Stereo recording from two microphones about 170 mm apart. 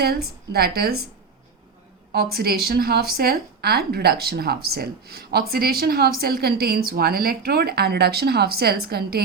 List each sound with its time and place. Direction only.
0.0 s a woman's voice: 70° right (ahead or behind)
2.1 s speech: 65° right (ahead or behind)